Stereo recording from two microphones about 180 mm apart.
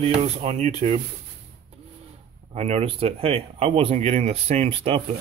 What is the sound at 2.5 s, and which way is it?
Speech, 35° right (ahead or behind).